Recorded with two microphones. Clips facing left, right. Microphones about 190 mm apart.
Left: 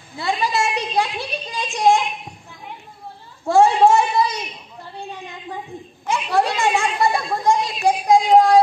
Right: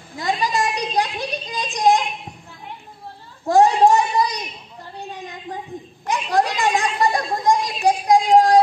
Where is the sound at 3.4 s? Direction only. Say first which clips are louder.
Even; 15° right (ahead or behind).